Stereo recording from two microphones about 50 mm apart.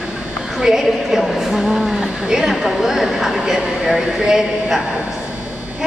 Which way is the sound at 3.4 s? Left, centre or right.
Centre.